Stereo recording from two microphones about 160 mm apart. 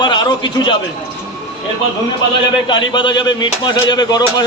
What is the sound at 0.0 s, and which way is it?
Speech, 25° left (ahead or behind).